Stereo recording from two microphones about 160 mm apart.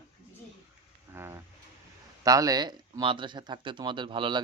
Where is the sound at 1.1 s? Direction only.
15° right (ahead or behind).